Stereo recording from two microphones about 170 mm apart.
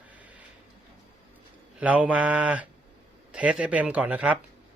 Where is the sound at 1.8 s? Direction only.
10° right (ahead or behind).